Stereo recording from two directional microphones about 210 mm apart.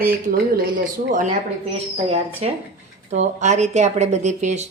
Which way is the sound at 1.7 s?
30° right (ahead or behind).